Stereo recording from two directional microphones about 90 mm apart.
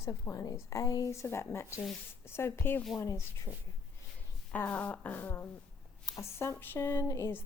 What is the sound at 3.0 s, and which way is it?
Speech, 35° left (ahead or behind).